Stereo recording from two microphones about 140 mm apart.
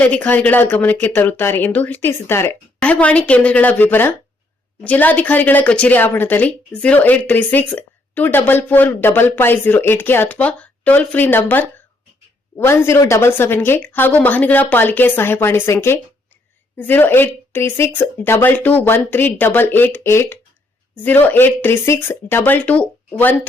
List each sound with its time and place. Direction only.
0.0 s a woman's voice: 10° left (ahead or behind)